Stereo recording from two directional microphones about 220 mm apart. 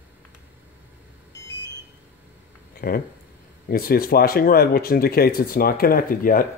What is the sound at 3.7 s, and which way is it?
Speech, 40° left (ahead or behind).